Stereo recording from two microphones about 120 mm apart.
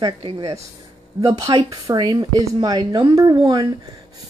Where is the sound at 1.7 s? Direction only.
35° right (ahead or behind).